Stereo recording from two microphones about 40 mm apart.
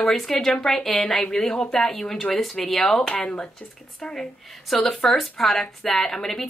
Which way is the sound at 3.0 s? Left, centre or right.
Left.